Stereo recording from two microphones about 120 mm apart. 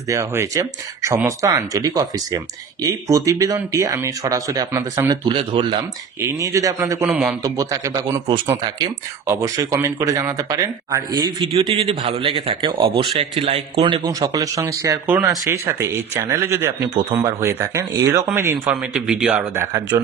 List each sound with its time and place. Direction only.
0.1 s speech: 25° right (ahead or behind)
5.1 s a man's voice: 45° right (ahead or behind)
6.2 s speech: 25° right (ahead or behind)
7.1 s speech: 5° right (ahead or behind)
7.4 s speech: 30° right (ahead or behind)
9.3 s speech: 25° right (ahead or behind)
11.4 s a man's voice: 50° right (ahead or behind)
14.0 s speech: 25° right (ahead or behind)
18.7 s speech: 5° right (ahead or behind)
19.5 s speech: 20° right (ahead or behind)